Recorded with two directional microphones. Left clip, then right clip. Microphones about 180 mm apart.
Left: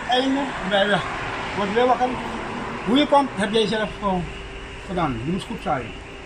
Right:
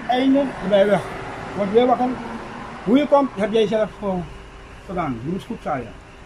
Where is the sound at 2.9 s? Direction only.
15° right (ahead or behind).